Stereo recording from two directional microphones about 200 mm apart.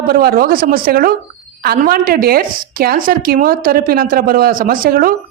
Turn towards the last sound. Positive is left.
turn(degrees=-45)  # may be behind; listen again after turning